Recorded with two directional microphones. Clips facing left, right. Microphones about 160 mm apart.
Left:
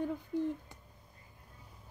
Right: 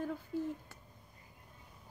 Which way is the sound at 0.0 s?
20° left (ahead or behind).